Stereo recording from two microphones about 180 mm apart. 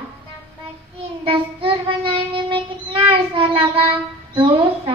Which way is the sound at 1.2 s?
30° right (ahead or behind).